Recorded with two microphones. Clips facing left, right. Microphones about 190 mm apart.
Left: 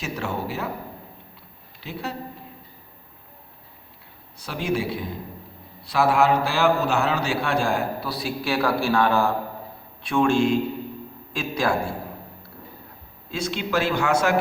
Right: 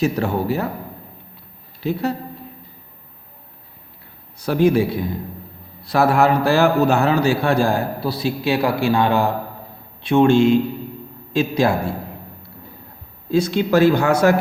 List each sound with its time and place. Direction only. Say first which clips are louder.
0.0 s a man's voice: right 9 dB; 40° right (ahead or behind)
1.8 s a man's voice: right 11 dB; 40° right (ahead or behind)
4.4 s a man's voice: right 10 dB; 45° right (ahead or behind); by 11.7 s 25° right (ahead or behind)
13.3 s a man's voice: right 9 dB; 40° right (ahead or behind)